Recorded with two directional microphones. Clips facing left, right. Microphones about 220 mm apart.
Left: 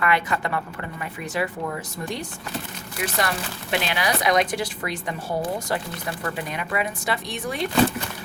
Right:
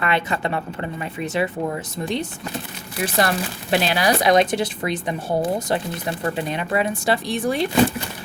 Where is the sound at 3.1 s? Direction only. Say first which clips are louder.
Right 7 dB; 35° right (ahead or behind).